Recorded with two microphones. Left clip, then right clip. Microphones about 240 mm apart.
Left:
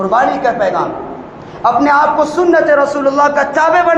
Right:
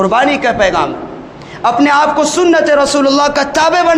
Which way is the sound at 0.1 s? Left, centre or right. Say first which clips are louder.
Right 1 dB; right.